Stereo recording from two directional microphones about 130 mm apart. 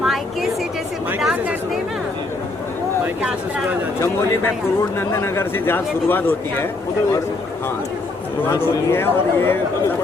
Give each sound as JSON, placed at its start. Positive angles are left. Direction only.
{"t": 0.0, "sound": "a sound", "side_deg": 0}
{"t": 1.2, "sound": "chatter", "side_deg": -5}
{"t": 3.2, "sound": "speech", "side_deg": -10}
{"t": 4.0, "sound": "speech", "side_deg": 20}
{"t": 8.5, "sound": "speech", "side_deg": 20}